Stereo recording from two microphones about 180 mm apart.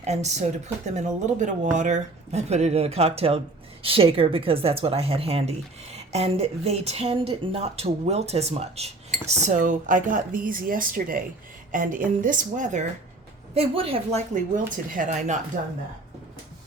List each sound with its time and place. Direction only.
0.0 s speech: 40° right (ahead or behind)